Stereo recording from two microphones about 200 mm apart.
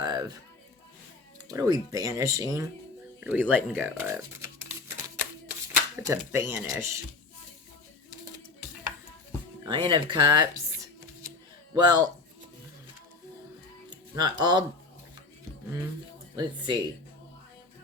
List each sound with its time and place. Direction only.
0.0 s a sound: 20° right (ahead or behind)
1.5 s speech: 15° right (ahead or behind)
5.7 s speech: 15° right (ahead or behind)
9.6 s speech: 25° right (ahead or behind)
11.7 s speech: 20° right (ahead or behind)
14.2 s speech: 20° right (ahead or behind)
16.3 s speech: 20° right (ahead or behind)